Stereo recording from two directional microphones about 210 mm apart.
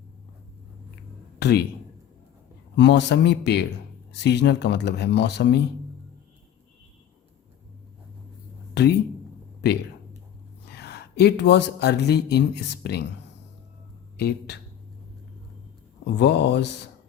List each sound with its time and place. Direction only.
1.4 s a sound: 50° left (ahead or behind)
2.7 s speech: 55° left (ahead or behind)
8.7 s speech: 55° left (ahead or behind)
10.7 s speech: 50° left (ahead or behind)
14.2 s speech: 50° left (ahead or behind)
16.1 s speech: 55° left (ahead or behind)